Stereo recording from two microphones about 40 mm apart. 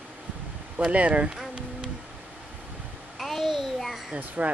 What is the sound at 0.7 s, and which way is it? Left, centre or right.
Speech, right.